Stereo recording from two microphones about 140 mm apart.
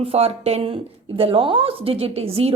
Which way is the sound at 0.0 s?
45° right (ahead or behind).